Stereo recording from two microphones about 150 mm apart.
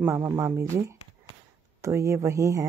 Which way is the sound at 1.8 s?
20° right (ahead or behind).